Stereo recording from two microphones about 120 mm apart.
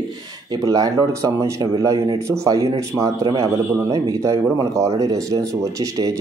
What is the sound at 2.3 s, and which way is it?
Speech, 25° right (ahead or behind).